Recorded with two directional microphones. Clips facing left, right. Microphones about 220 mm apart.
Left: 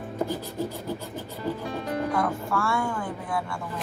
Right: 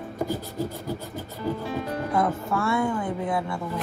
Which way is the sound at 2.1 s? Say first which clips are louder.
Right 2 dB; 20° right (ahead or behind).